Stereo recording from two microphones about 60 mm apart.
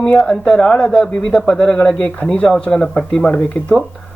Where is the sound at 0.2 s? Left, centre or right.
Centre.